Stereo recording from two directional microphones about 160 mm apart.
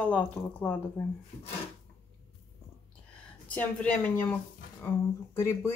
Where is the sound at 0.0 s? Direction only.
10° left (ahead or behind).